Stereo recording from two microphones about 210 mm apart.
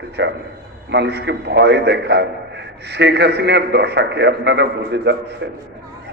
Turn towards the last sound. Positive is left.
turn(degrees=-55)  # may be behind; listen again after turning